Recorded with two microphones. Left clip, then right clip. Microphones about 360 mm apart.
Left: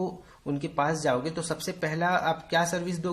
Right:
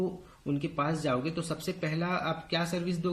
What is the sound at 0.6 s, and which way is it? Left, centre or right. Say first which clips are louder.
Speech: left 6 dB; centre.